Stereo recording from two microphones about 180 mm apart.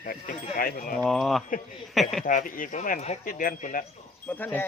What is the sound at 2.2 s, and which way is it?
Speech, 50° left (ahead or behind).